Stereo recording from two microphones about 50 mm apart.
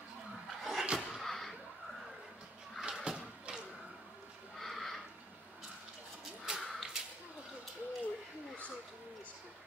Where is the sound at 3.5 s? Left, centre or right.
Centre.